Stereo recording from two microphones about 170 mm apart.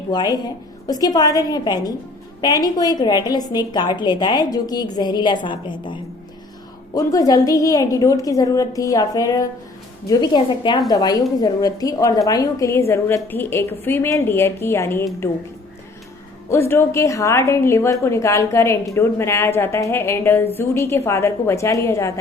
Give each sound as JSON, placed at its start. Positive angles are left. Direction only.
{"t": 0.1, "sound": "a woman's voice", "side_deg": 25}
{"t": 16.5, "sound": "a woman's voice", "side_deg": 15}